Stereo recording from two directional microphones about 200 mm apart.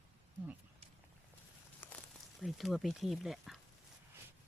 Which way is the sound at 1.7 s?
10° left (ahead or behind).